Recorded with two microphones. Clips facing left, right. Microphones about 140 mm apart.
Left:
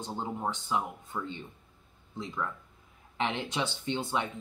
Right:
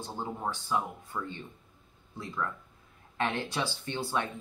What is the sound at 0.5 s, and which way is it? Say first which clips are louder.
Speech: right 2 dB; 20° left (ahead or behind).